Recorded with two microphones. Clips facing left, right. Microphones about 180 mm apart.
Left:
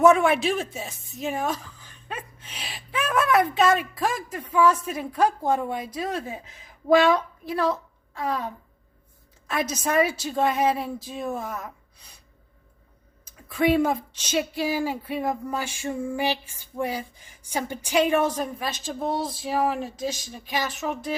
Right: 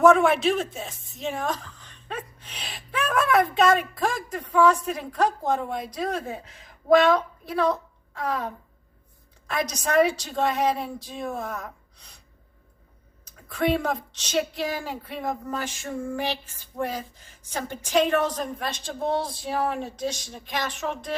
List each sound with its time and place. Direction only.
0.0 s a woman's voice: centre (ahead or behind)
13.5 s speech: 5° left (ahead or behind)